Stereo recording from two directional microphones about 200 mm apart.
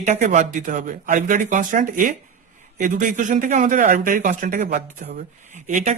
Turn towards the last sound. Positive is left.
turn(degrees=-40)  # may be behind; listen again after turning